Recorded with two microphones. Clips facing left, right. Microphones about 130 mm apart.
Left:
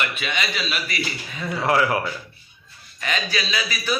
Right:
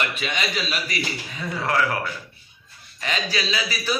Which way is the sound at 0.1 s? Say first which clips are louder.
Even; 35° right (ahead or behind).